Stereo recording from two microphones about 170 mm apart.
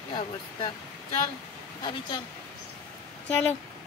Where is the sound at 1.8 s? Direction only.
25° left (ahead or behind).